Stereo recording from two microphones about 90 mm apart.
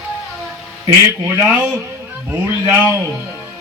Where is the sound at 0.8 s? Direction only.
30° right (ahead or behind).